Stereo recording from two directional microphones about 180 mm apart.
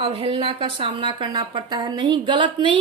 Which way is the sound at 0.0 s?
30° right (ahead or behind).